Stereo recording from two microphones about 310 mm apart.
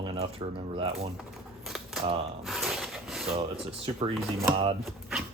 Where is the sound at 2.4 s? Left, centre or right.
Centre.